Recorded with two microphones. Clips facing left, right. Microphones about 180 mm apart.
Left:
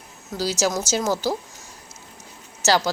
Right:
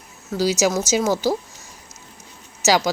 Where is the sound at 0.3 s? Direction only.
10° right (ahead or behind).